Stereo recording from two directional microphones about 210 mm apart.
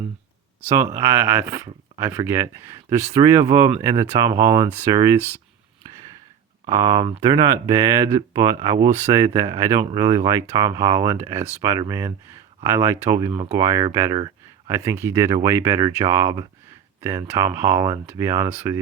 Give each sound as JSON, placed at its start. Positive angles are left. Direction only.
{"t": 0.9, "sound": "speech", "side_deg": -10}
{"t": 6.7, "sound": "speech", "side_deg": -20}